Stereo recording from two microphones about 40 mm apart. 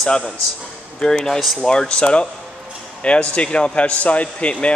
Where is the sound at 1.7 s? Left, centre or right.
Left.